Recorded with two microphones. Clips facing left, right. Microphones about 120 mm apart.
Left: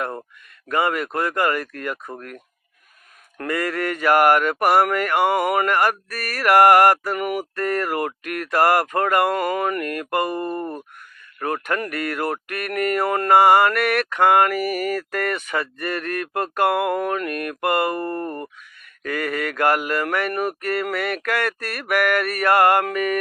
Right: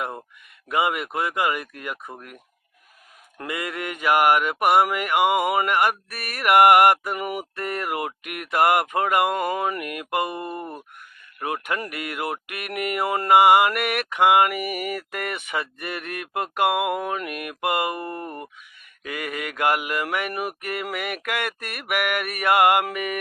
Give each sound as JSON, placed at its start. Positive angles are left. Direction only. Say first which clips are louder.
{"t": 0.7, "sound": "speech", "louder": "left 2 dB", "side_deg": -15}